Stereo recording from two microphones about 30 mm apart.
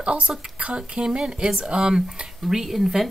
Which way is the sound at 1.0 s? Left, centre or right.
Right.